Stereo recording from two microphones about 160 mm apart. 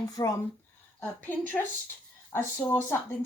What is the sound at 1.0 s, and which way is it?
Speech, 10° left (ahead or behind).